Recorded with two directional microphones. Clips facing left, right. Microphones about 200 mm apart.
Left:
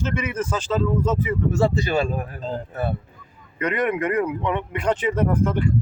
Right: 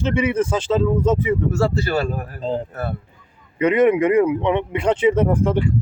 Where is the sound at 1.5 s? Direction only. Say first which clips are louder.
Right 1 dB; 20° left (ahead or behind).